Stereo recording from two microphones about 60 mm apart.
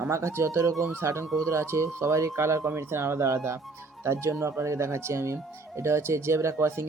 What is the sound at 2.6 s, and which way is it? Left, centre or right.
Speech, right.